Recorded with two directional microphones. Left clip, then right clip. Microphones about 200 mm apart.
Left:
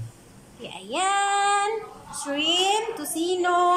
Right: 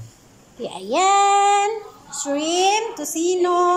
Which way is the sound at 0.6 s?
20° right (ahead or behind).